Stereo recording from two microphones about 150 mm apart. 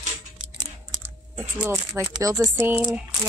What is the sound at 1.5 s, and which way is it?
Speech, 15° right (ahead or behind).